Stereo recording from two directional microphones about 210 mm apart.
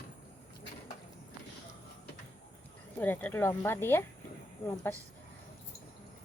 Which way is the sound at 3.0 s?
10° left (ahead or behind).